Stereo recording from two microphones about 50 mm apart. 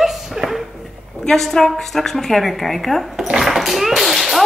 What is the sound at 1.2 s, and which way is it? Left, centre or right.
A child's voice, centre.